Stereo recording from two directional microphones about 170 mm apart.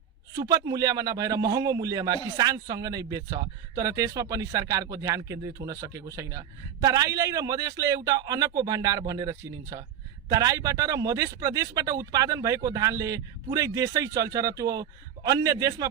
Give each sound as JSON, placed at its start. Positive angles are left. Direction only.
{"t": 0.3, "sound": "a man's voice", "side_deg": -20}